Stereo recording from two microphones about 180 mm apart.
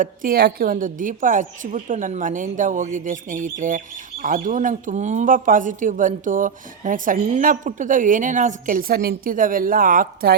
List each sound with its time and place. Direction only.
0.0 s a woman's voice: 50° right (ahead or behind)